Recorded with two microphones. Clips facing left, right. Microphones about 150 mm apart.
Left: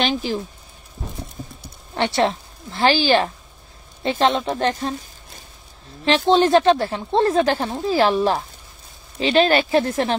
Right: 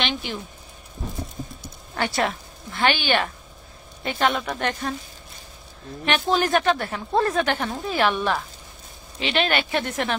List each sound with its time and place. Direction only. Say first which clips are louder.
0.0 s speech: left 6 dB; 35° left (ahead or behind)
2.0 s speech: left 5 dB; 25° left (ahead or behind)
6.0 s speech: left 6 dB; 30° left (ahead or behind)